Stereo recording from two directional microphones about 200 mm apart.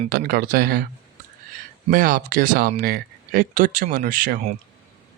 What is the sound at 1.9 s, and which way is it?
Speech, 45° right (ahead or behind).